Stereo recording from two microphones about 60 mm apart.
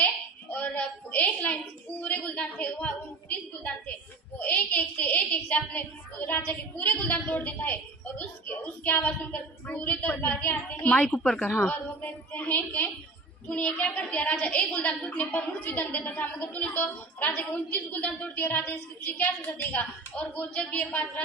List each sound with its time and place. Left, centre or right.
0.5 s a sound: left
2.0 s a woman's voice: left
11.6 s a woman's voice: left